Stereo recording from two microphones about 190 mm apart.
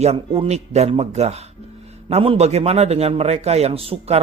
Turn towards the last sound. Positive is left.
turn(degrees=-30)  # may be behind; listen again after turning